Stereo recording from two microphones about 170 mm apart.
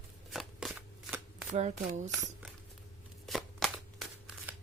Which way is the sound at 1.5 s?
45° right (ahead or behind).